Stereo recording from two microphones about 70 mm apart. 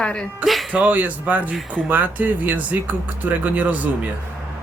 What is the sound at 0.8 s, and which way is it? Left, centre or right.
Speech, right.